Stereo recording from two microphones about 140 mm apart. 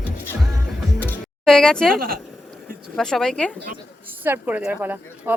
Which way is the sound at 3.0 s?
5° left (ahead or behind).